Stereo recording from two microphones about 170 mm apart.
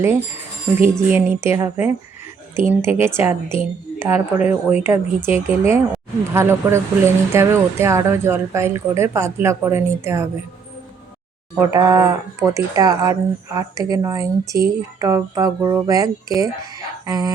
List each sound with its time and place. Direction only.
0.8 s speech: 15° right (ahead or behind)
11.5 s speech: 20° right (ahead or behind)